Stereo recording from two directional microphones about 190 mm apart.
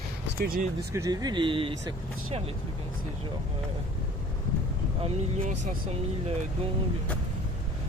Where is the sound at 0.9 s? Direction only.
20° right (ahead or behind).